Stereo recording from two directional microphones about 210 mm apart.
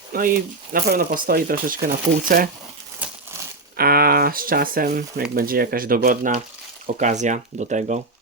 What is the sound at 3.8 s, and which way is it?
Speech, 45° right (ahead or behind).